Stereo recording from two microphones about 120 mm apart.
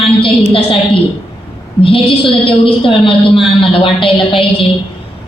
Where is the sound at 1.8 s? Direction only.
50° left (ahead or behind).